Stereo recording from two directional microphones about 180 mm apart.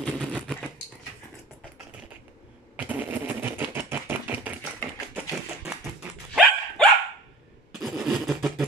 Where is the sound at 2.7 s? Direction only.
10° right (ahead or behind).